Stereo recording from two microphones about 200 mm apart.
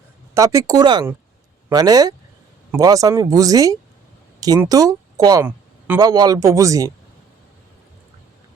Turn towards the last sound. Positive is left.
turn(degrees=-15)  # may be behind; listen again after turning